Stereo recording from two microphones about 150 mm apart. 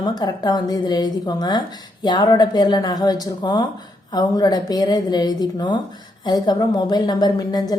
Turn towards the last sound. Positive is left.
turn(degrees=25)  # may be behind; listen again after turning